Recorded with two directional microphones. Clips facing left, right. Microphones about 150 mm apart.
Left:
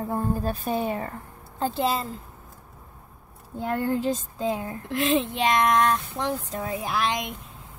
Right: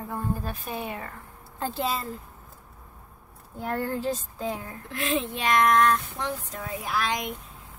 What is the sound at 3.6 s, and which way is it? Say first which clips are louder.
Speech: left 3 dB; 20° left (ahead or behind).